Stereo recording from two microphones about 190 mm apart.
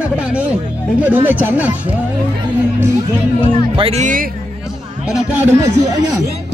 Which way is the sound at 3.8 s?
35° right (ahead or behind).